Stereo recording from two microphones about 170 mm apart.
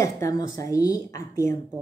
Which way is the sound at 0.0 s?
20° left (ahead or behind).